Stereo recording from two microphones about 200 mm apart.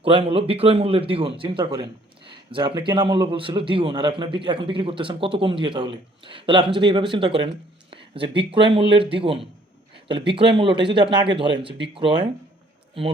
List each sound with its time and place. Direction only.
0.0 s speech: 30° right (ahead or behind)